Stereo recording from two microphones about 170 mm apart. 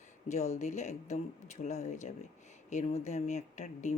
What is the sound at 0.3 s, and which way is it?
Speech, 40° left (ahead or behind).